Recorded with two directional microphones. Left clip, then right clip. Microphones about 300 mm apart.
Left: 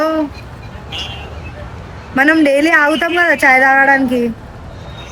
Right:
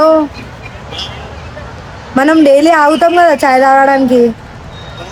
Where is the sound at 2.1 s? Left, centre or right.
Centre.